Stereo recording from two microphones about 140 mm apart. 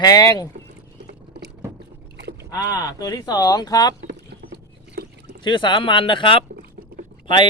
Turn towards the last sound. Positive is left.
turn(degrees=35)  # may be behind; listen again after turning